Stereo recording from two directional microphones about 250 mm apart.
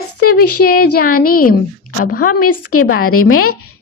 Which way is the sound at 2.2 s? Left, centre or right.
Left.